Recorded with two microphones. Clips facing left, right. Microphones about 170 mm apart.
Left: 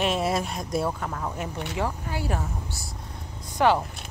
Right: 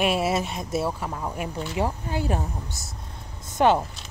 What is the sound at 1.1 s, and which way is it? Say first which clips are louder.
Speech: right 1 dB; 15° right (ahead or behind).